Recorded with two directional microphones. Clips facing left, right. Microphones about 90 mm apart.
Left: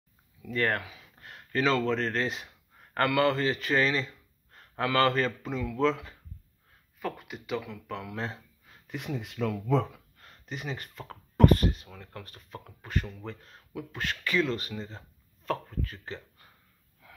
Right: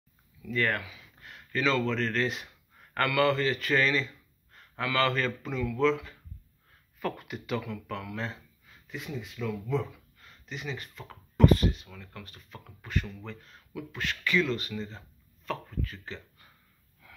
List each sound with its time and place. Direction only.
0.5 s speech: 35° left (ahead or behind)
7.0 s speech: 10° left (ahead or behind)
7.9 s speech: 25° left (ahead or behind)
8.8 s speech: 60° left (ahead or behind); by 9.8 s 80° left
10.2 s speech: 45° left (ahead or behind)
11.9 s speech: 35° left (ahead or behind)